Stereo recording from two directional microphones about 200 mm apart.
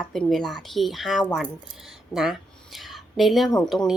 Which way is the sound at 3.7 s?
Centre (ahead or behind).